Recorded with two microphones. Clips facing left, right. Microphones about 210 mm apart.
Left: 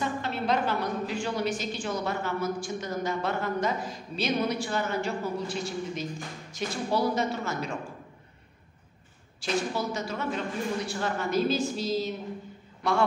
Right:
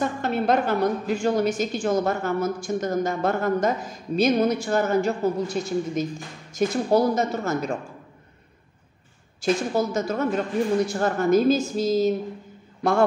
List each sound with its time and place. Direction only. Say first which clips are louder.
0.0 s a woman's voice: right 6 dB; 50° right (ahead or behind)
9.4 s a woman's voice: right 7 dB; 45° right (ahead or behind)